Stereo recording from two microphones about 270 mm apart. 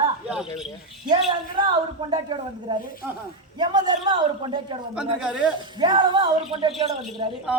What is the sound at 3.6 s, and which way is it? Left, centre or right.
Speech, centre.